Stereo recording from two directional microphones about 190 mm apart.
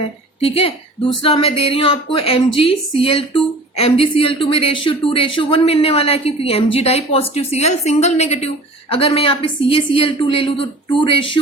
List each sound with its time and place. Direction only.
0.4 s a woman's voice: 30° left (ahead or behind)